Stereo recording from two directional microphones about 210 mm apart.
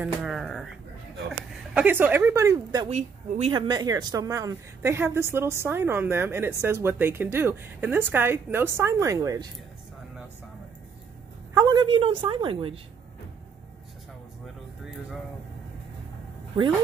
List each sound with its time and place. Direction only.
0.0 s speech: centre (ahead or behind)
1.7 s speech: 5° right (ahead or behind)
2.9 s speech: 30° right (ahead or behind)
11.5 s a woman's voice: 20° right (ahead or behind)